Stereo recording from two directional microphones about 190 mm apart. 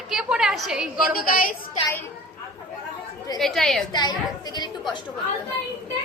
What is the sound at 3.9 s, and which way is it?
Speech, 20° left (ahead or behind).